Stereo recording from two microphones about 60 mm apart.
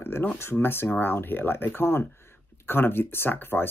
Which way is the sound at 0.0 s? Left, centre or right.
Left.